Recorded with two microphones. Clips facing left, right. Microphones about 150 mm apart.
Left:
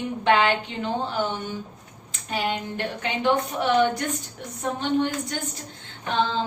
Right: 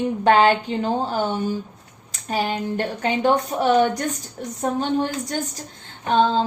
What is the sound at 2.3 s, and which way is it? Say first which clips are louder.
A woman's voice: right 4 dB; 40° right (ahead or behind).